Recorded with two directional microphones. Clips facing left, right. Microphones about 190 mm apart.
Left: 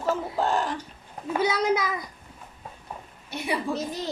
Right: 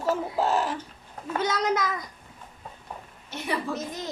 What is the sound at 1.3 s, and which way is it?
Speech, 10° left (ahead or behind).